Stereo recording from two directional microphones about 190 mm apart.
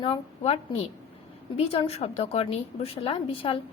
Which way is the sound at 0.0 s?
30° left (ahead or behind).